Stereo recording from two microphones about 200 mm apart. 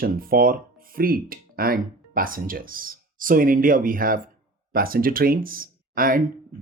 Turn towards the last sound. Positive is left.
turn(degrees=-45)  # may be behind; listen again after turning